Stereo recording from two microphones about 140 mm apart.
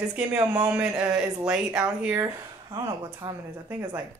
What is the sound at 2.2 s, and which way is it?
A woman's voice, 30° right (ahead or behind).